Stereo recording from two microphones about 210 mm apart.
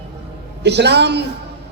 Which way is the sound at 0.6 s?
55° right (ahead or behind).